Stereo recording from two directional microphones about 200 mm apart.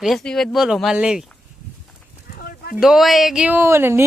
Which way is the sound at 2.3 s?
50° left (ahead or behind).